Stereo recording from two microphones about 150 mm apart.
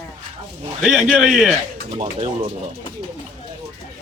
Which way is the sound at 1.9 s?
35° right (ahead or behind).